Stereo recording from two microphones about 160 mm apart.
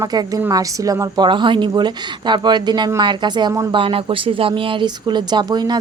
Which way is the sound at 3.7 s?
35° right (ahead or behind).